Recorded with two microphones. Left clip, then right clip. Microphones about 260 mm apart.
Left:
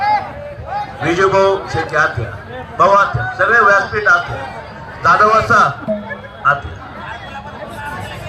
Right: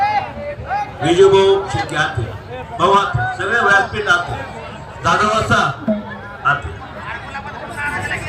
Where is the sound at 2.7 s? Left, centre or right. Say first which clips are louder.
Left 3 dB; centre.